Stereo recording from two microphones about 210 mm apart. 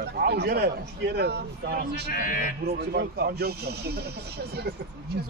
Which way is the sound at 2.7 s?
50° right (ahead or behind).